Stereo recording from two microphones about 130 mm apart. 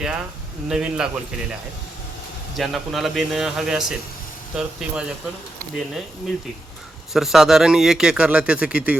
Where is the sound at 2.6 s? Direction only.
Centre (ahead or behind).